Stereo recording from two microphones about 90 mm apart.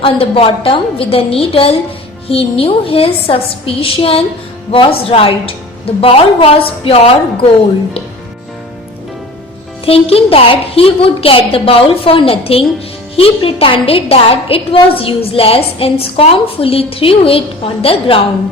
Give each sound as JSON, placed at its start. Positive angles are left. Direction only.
{"t": 0.0, "sound": "a woman's voice", "side_deg": 90}
{"t": 9.8, "sound": "a woman's voice", "side_deg": 90}